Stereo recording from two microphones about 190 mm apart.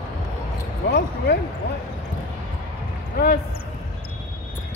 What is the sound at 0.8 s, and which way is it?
Speech, 60° left (ahead or behind).